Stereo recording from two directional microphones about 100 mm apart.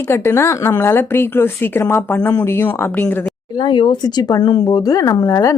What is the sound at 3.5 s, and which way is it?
A woman's voice, 50° left (ahead or behind).